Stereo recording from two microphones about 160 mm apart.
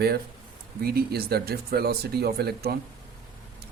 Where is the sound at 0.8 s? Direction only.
80° right.